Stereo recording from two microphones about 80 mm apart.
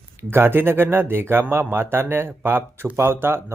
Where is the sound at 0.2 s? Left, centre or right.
Right.